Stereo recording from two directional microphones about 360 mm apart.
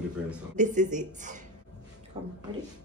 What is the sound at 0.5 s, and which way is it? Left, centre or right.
Speech, right.